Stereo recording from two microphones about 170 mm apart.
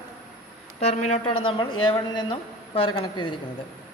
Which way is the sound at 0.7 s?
40° left (ahead or behind).